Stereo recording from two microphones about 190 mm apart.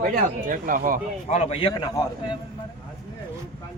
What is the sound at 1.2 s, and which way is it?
Speech, 30° left (ahead or behind).